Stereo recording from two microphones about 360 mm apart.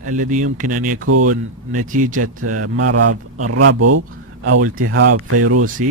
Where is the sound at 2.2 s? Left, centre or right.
Right.